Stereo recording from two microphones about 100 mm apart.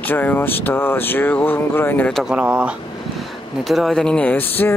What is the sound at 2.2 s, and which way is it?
Speech, 10° right (ahead or behind).